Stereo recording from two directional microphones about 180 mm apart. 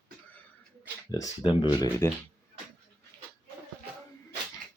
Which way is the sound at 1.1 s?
20° left (ahead or behind).